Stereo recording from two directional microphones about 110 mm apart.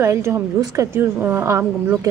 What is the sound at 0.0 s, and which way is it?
A woman's voice, 25° right (ahead or behind).